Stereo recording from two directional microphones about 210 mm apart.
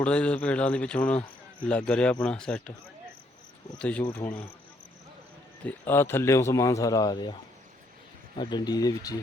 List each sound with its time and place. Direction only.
0.0 s speech: 5° left (ahead or behind)
3.8 s speech: 5° left (ahead or behind)
5.6 s speech: 10° left (ahead or behind)
8.4 s speech: 20° left (ahead or behind)